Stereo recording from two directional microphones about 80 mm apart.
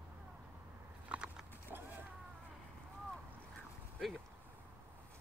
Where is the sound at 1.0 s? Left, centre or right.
Centre.